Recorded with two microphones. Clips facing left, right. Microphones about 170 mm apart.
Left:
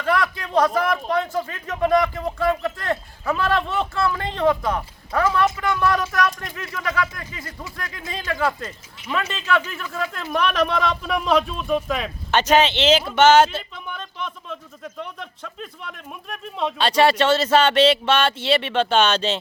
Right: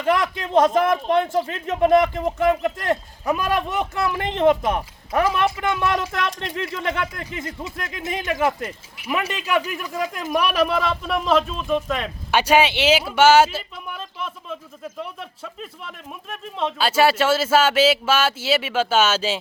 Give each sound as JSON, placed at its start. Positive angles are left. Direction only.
{"t": 0.0, "sound": "a man's voice", "side_deg": -20}
{"t": 12.3, "sound": "speech", "side_deg": -10}